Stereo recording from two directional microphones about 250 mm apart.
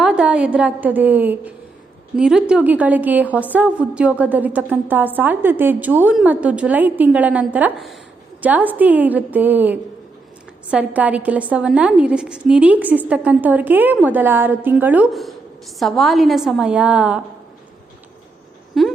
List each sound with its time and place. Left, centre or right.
0.0 s a woman's voice: centre
18.8 s a woman's voice: centre